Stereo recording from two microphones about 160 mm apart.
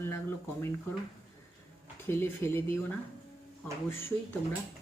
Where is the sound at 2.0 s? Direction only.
15° left (ahead or behind).